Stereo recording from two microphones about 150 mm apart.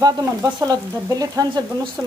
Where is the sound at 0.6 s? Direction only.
25° right (ahead or behind).